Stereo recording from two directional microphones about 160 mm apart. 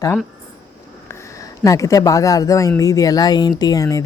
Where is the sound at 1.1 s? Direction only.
15° left (ahead or behind).